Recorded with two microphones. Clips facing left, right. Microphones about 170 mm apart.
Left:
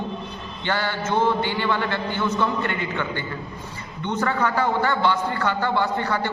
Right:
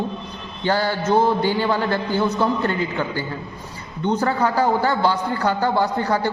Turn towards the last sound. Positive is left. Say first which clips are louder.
# right 3 dB
turn(degrees=-40)  # may be behind; listen again after turning